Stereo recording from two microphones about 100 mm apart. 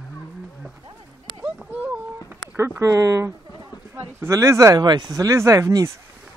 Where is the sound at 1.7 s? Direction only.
20° right (ahead or behind).